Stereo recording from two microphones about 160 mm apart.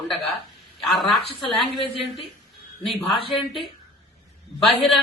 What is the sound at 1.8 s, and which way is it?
Speech, 35° left (ahead or behind).